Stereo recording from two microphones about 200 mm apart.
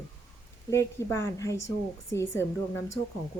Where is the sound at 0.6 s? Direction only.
15° left (ahead or behind).